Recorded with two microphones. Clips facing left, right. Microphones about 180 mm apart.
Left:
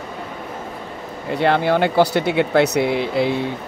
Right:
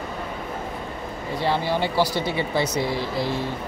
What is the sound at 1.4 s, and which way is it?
Speech, 60° left (ahead or behind).